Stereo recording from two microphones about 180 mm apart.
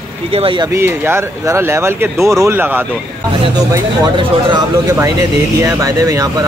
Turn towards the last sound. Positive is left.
turn(degrees=-15)  # may be behind; listen again after turning